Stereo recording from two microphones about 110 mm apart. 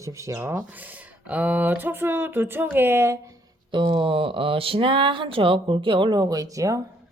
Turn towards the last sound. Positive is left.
turn(degrees=-30)  # may be behind; listen again after turning